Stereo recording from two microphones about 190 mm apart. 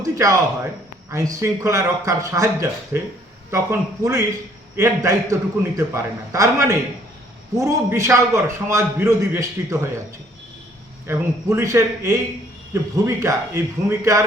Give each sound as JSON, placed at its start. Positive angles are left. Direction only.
{"t": 0.0, "sound": "a man's voice", "side_deg": -20}
{"t": 11.5, "sound": "a man's voice", "side_deg": -15}